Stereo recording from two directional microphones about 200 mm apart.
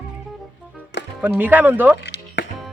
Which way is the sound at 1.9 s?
60° left (ahead or behind).